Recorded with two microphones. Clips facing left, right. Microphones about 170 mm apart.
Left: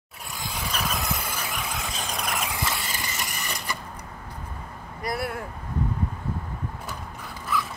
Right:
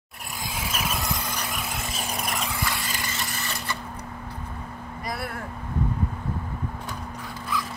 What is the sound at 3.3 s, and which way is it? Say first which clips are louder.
Mechanisms: right 1 dB; 15° left (ahead or behind).